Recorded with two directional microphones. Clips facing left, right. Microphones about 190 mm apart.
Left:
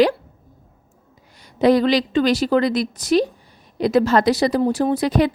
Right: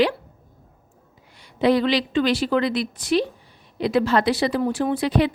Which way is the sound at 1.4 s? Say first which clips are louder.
Left 3 dB; 40° left (ahead or behind).